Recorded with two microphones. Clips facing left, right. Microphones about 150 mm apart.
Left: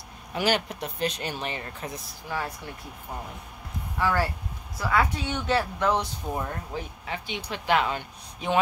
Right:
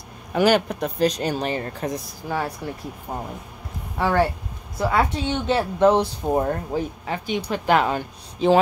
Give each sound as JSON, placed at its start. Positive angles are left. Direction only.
{"t": 0.3, "sound": "speech", "side_deg": -50}
{"t": 4.0, "sound": "a woman's voice", "side_deg": -25}
{"t": 6.2, "sound": "speech", "side_deg": -45}
{"t": 8.4, "sound": "speech", "side_deg": -30}